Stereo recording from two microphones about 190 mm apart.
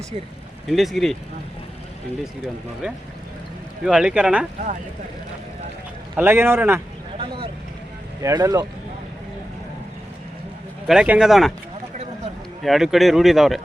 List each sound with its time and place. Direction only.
0.7 s speech: centre (ahead or behind)
2.8 s speech: 5° right (ahead or behind)
6.1 s speech: 10° right (ahead or behind)
7.2 s vehicle: 30° right (ahead or behind)
8.2 s speech: 15° right (ahead or behind)
10.8 s speech: 5° right (ahead or behind)
12.6 s speech: centre (ahead or behind)